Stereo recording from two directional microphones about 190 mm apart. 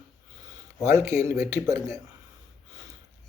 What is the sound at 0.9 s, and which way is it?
Speech, 15° right (ahead or behind).